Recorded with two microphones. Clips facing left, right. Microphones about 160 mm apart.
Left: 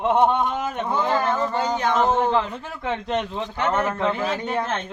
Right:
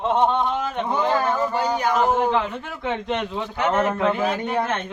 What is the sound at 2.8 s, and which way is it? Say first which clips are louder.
Speech: even; centre (ahead or behind).